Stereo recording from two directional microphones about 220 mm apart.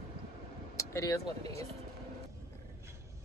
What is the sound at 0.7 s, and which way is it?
Speech, 15° left (ahead or behind).